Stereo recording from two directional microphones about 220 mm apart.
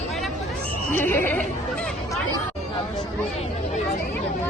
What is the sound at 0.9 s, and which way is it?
Speech, 10° left (ahead or behind).